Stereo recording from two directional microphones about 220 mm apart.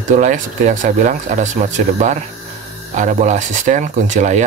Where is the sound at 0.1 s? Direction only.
35° right (ahead or behind).